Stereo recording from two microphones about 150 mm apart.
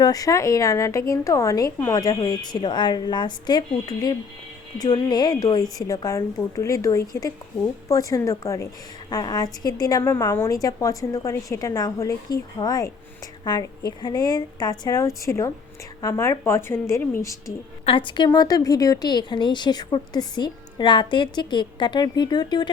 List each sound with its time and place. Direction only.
0.0 s a woman's voice: 25° left (ahead or behind)
17.8 s a woman's voice: 35° left (ahead or behind)